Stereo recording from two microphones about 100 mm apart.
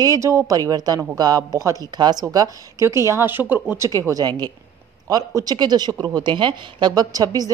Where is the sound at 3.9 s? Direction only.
35° right (ahead or behind).